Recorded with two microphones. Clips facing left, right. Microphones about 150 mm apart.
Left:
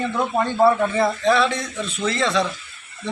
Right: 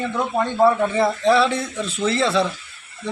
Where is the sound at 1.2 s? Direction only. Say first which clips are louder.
Right 2 dB; 30° right (ahead or behind).